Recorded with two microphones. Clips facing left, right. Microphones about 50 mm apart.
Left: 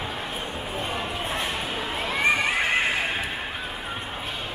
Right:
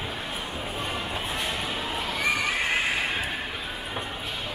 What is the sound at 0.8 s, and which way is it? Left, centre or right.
Neigh, left.